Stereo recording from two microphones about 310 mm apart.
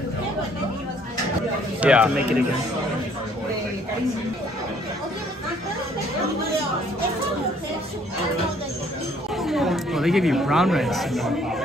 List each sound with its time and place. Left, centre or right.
1.8 s speech: centre
9.4 s speech: centre